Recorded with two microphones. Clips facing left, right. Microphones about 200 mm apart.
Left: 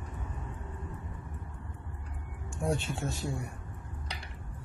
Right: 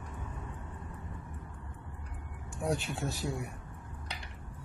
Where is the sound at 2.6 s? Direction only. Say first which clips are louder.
Left 1 dB; centre (ahead or behind).